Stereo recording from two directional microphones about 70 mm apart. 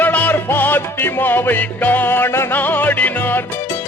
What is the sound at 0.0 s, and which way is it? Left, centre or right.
Music, left.